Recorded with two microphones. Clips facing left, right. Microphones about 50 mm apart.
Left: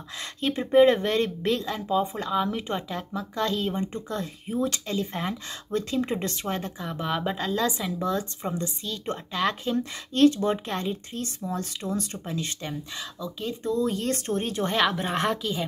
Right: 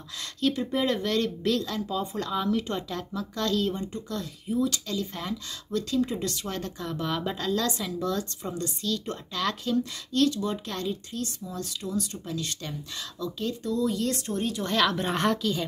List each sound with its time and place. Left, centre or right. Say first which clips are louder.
0.2 s speech: right 1 dB; left
3.8 s speech: left 3 dB; left
13.6 s speech: left 2 dB; left
14.7 s speech: even; left
15.0 s a woman's voice: even; centre